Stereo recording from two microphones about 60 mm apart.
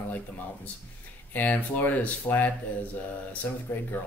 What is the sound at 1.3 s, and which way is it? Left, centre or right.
Speech, left.